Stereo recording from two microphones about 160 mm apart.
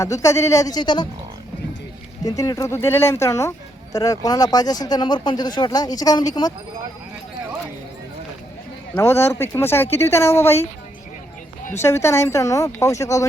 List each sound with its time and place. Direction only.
0.0 s speech: 20° left (ahead or behind)
2.2 s speech: 20° left (ahead or behind)
9.0 s speech: 15° left (ahead or behind)
11.8 s speech: 15° left (ahead or behind)